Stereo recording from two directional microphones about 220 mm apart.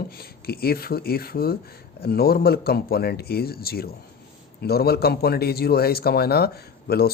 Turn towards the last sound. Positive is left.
turn(degrees=45)  # may be behind; listen again after turning